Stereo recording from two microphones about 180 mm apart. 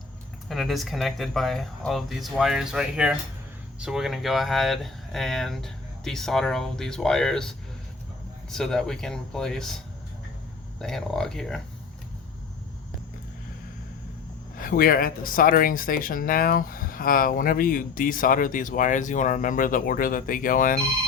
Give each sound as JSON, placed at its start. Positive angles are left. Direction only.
{"t": 0.4, "sound": "speech", "side_deg": 0}
{"t": 10.8, "sound": "speech", "side_deg": 0}
{"t": 14.6, "sound": "speech", "side_deg": 55}